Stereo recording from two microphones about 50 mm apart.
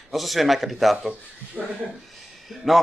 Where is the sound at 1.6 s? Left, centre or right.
Right.